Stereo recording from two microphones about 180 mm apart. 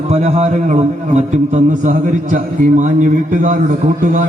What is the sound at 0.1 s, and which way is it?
A man's voice, 40° right (ahead or behind).